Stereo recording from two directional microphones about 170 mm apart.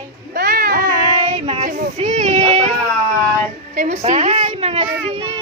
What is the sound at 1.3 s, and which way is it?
Child singing, 40° right (ahead or behind).